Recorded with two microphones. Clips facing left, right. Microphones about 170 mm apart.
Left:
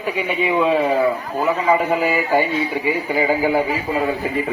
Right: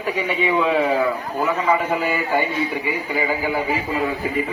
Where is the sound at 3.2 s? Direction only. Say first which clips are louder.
Left 5 dB; 40° left (ahead or behind).